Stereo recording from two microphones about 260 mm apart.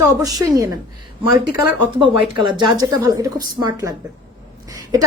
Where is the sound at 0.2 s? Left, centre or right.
Centre.